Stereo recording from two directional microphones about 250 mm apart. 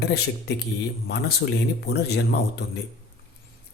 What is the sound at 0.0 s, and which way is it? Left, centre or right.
Speech, left.